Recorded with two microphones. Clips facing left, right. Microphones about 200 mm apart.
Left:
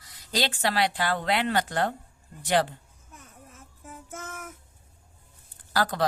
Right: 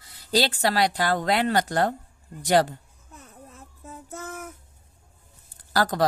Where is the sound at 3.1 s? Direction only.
35° right (ahead or behind).